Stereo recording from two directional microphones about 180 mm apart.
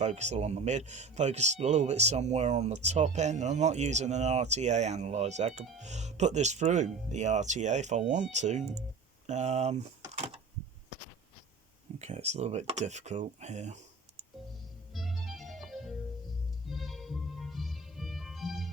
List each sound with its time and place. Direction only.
0.0 s speech: 40° right (ahead or behind)
10.1 s a sound: 35° right (ahead or behind)
11.9 s speech: 40° right (ahead or behind)
14.9 s music: centre (ahead or behind)